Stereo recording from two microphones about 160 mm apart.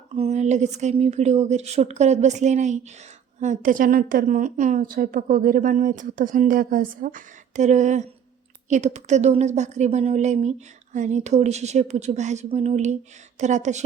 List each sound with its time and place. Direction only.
0.2 s a woman's voice: 45° right (ahead or behind)